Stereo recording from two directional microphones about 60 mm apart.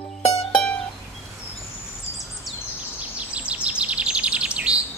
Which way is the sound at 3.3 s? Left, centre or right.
Centre.